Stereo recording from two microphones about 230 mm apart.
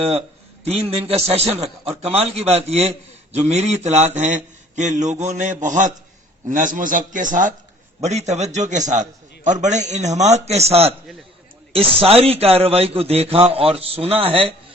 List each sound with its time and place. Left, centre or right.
0.1 s a man's voice: right
12.0 s a man's voice: right